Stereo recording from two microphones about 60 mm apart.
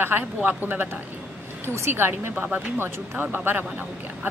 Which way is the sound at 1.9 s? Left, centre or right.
Right.